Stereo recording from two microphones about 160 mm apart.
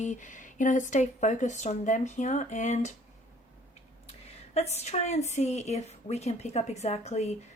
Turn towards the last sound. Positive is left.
turn(degrees=45)  # may be behind; listen again after turning